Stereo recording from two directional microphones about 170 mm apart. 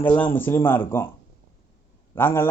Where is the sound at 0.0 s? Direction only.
10° left (ahead or behind).